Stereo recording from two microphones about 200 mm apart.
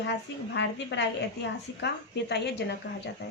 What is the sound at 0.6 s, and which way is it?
A woman's voice, 60° left (ahead or behind).